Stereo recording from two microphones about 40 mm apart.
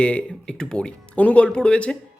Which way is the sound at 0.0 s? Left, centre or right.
Left.